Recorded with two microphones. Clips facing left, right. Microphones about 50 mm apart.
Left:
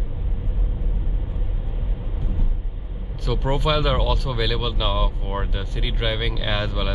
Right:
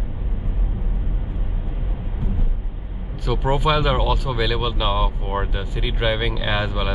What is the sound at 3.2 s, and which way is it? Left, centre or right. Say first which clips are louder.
Speech: right 3 dB; centre.